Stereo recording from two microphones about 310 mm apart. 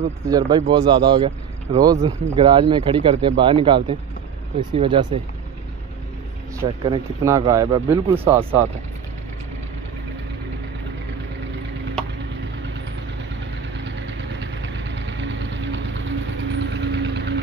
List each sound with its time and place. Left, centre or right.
0.0 s speech: centre
6.6 s speech: centre
14.4 s vehicle: right